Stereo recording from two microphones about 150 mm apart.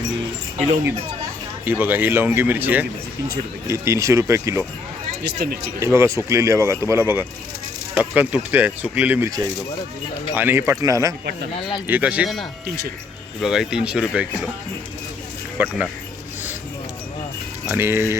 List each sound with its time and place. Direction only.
1.6 s speech: 10° right (ahead or behind)
5.2 s speech: 90° right
5.8 s speech: 20° right (ahead or behind)
10.3 s speech: 15° right (ahead or behind)
11.5 s speech: 35° left (ahead or behind)
11.9 s speech: 10° right (ahead or behind)
15.5 s speech: 10° right (ahead or behind)
17.7 s speech: 15° right (ahead or behind)